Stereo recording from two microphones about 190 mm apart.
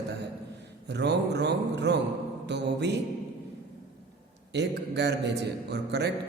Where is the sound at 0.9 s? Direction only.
65° right (ahead or behind).